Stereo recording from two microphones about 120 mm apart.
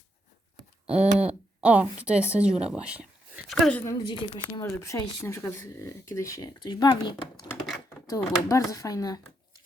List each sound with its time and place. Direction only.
0.9 s a woman's voice: 10° right (ahead or behind)
3.5 s speech: 5° left (ahead or behind)
4.0 s speech: 40° left (ahead or behind)
4.6 s speech: 30° left (ahead or behind)
6.6 s speech: 40° left (ahead or behind)
8.0 s speech: 30° left (ahead or behind)